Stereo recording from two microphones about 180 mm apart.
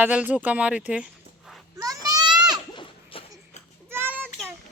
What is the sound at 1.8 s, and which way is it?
Goat, 20° right (ahead or behind).